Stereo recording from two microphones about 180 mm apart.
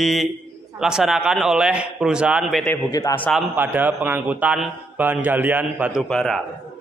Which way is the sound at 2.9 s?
15° left (ahead or behind).